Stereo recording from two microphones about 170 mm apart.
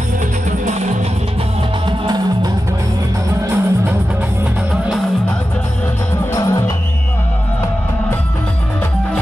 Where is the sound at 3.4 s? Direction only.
15° right (ahead or behind).